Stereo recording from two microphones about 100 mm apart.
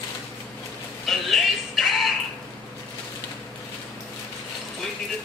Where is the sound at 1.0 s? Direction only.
Centre (ahead or behind).